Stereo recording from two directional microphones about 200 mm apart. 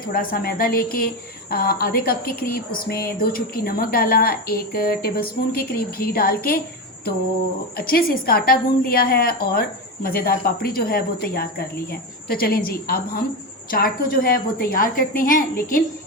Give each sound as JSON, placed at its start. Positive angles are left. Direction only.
{"t": 0.1, "sound": "a woman's voice", "side_deg": 45}
{"t": 7.8, "sound": "a woman's voice", "side_deg": 50}